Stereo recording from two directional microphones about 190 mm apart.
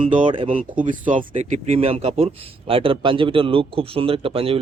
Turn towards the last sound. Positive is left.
turn(degrees=-30)  # may be behind; listen again after turning